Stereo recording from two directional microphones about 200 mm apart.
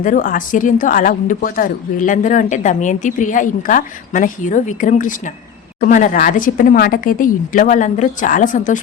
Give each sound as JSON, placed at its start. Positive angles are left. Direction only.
{"t": 0.0, "sound": "speech", "side_deg": 40}